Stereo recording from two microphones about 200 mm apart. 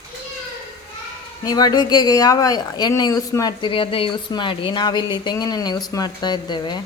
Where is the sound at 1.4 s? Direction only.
20° left (ahead or behind).